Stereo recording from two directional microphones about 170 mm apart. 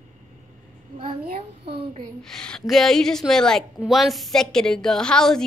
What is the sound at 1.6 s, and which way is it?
Child singing, 35° right (ahead or behind).